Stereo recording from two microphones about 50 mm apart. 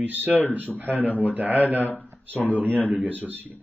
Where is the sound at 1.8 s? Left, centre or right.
Left.